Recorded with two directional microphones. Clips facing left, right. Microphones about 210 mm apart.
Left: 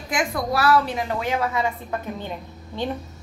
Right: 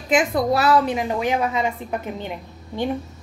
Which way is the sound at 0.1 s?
20° right (ahead or behind).